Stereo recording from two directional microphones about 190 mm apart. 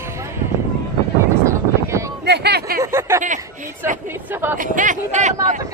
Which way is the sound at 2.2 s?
60° right (ahead or behind).